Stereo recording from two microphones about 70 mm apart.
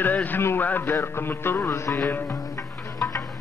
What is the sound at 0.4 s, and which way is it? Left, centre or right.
Music, left.